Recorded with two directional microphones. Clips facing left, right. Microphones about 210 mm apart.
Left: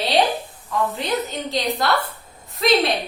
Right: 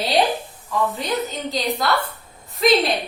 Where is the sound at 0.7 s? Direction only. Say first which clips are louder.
Even; centre (ahead or behind).